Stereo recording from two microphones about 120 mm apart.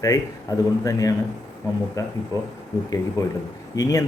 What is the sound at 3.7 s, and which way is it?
Speech, 30° left (ahead or behind).